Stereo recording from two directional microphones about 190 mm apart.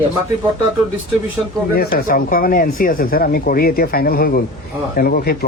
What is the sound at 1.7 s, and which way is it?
Speech, 50° left (ahead or behind).